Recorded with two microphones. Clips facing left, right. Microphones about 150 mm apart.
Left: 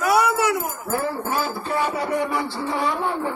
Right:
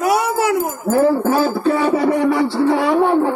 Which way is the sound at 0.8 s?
90° right.